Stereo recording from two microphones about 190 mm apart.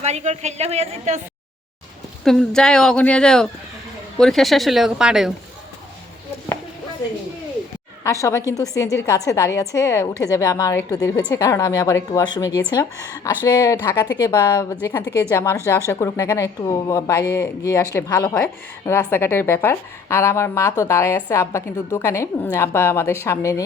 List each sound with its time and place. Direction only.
0.0 s a woman's voice: 35° right (ahead or behind)
2.2 s speech: centre (ahead or behind)
8.0 s a woman's voice: 15° left (ahead or behind)